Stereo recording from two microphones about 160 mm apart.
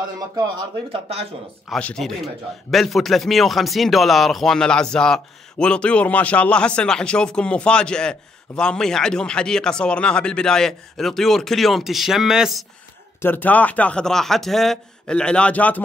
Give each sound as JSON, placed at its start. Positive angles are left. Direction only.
{"t": 0.4, "sound": "speech", "side_deg": -30}
{"t": 1.7, "sound": "a man's voice", "side_deg": 5}
{"t": 13.2, "sound": "speech", "side_deg": 10}